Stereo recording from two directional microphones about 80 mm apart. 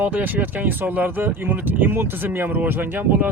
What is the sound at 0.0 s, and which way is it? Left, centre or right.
Speech, right.